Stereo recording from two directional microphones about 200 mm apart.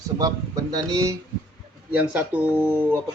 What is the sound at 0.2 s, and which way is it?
Speech, 20° right (ahead or behind).